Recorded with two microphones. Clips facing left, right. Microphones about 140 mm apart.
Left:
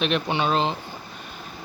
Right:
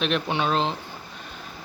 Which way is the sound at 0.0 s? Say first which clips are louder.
Left 1 dB; centre (ahead or behind).